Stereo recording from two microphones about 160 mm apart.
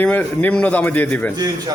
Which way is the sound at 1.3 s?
25° right (ahead or behind).